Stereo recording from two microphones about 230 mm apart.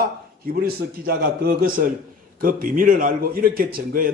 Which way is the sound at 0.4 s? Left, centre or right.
Right.